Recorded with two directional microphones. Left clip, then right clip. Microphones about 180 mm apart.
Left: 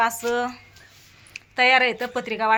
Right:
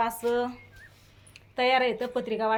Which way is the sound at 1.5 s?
15° left (ahead or behind).